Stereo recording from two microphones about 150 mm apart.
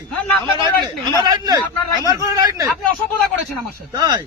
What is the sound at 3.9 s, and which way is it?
Speech, 25° right (ahead or behind).